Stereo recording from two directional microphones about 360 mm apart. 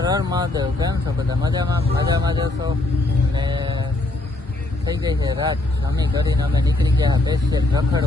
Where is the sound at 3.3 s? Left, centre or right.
Centre.